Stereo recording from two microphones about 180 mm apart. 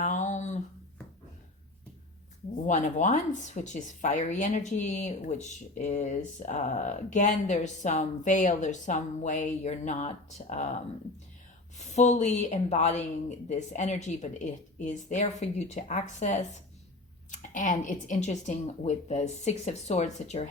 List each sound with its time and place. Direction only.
0.0 s a sound: 40° left (ahead or behind)
2.6 s speech: 45° left (ahead or behind)
11.9 s speech: 40° left (ahead or behind)